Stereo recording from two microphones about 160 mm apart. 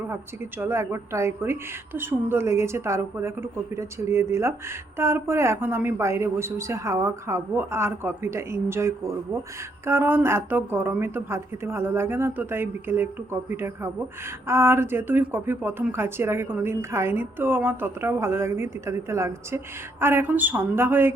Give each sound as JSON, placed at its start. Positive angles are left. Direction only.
{"t": 0.6, "sound": "speech", "side_deg": -15}